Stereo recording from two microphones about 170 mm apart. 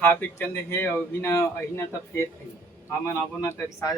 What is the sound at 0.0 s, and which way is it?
Speech, 10° left (ahead or behind).